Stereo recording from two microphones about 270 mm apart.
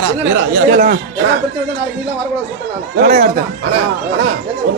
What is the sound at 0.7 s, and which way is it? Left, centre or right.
Speech, right.